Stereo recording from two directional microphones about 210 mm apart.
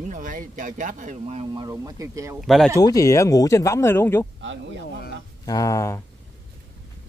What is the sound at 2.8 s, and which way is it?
Speech, 15° left (ahead or behind).